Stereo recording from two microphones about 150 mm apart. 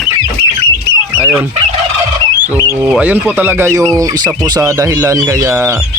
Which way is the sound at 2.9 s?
10° right (ahead or behind).